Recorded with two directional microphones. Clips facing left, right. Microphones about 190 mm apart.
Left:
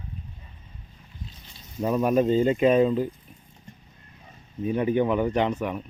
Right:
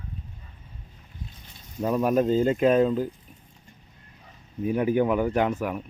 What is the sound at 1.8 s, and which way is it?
Speech, centre (ahead or behind).